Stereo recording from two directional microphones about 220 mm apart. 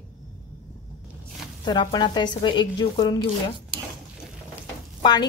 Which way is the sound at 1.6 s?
20° left (ahead or behind).